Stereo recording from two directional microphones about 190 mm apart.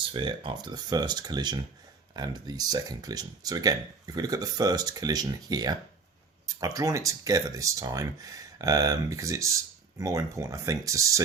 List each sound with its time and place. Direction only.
0.1 s speech: 25° right (ahead or behind)